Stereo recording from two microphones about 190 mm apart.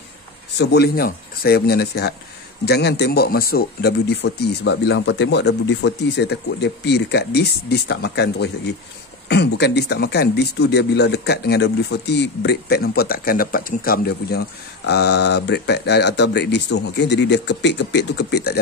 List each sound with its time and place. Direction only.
0.6 s speech: 60° left (ahead or behind)